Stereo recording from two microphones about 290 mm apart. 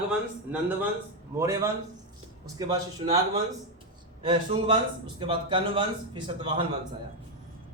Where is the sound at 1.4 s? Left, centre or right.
Centre.